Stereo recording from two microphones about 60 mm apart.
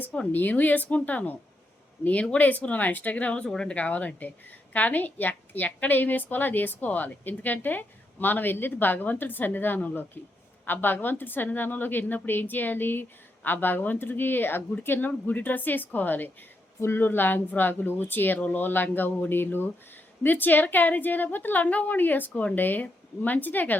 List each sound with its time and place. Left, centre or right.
0.3 s speech: left
2.4 s speech: left
3.8 s a woman's voice: left